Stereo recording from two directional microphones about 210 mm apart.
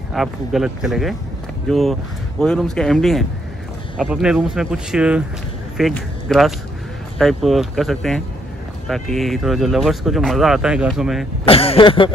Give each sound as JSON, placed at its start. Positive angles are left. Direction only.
{"t": 0.1, "sound": "a man's voice", "side_deg": 0}
{"t": 11.4, "sound": "cough", "side_deg": 25}